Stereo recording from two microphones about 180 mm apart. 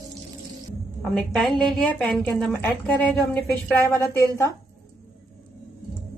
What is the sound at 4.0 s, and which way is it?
Speech, 15° left (ahead or behind).